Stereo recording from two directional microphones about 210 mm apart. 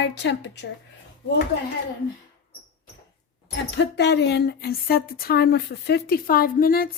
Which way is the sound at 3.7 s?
55° left (ahead or behind).